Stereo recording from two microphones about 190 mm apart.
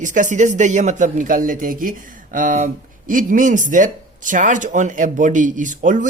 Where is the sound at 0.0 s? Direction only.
40° right (ahead or behind).